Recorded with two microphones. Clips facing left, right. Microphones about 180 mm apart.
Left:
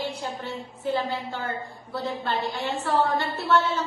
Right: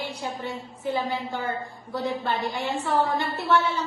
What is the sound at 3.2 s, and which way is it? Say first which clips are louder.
Speech: even; 15° right (ahead or behind).